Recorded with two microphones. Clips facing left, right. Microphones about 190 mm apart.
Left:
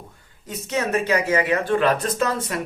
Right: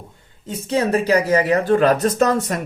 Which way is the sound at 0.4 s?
30° right (ahead or behind).